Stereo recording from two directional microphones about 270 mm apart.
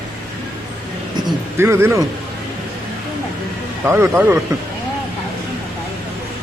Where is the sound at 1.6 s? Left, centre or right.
Centre.